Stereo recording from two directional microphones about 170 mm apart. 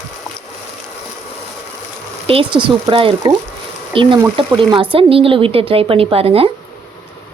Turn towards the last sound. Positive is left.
turn(degrees=-35)  # may be behind; listen again after turning